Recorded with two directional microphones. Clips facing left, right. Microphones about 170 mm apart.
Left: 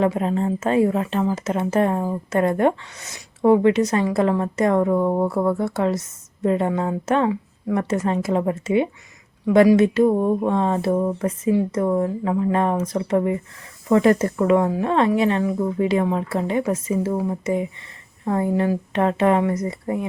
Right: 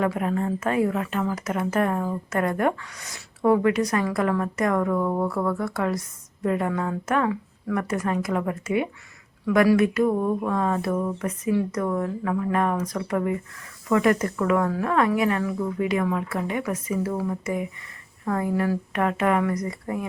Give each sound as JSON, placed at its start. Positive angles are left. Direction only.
{"t": 0.0, "sound": "a woman's voice", "side_deg": 25}